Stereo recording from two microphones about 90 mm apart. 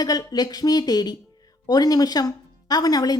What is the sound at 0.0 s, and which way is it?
A woman's voice, 45° left (ahead or behind).